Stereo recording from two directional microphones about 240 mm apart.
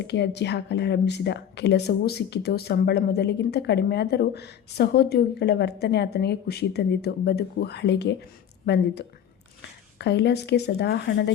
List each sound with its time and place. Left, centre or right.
0.0 s speech: left